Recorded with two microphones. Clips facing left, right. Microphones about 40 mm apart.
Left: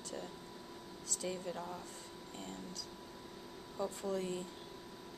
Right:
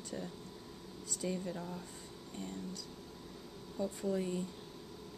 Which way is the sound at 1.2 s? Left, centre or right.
Centre.